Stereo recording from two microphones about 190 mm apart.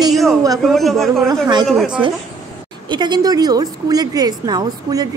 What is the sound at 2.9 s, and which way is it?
A woman's voice, 20° right (ahead or behind).